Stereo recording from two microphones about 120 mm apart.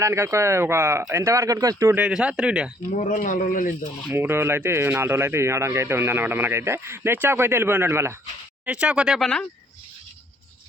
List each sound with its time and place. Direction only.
0.0 s speech: 25° right (ahead or behind)
2.0 s speech: 10° right (ahead or behind)
2.9 s speech: 90° left
4.1 s speech: 20° right (ahead or behind)
8.6 s speech: 10° right (ahead or behind)